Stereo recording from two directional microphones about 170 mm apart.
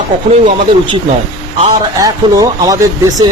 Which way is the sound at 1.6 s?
20° right (ahead or behind).